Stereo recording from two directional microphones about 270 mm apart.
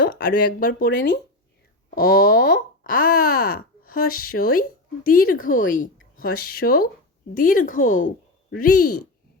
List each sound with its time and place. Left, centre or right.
0.0 s speech: left